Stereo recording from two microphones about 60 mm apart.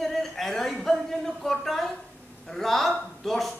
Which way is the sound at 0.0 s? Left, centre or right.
Centre.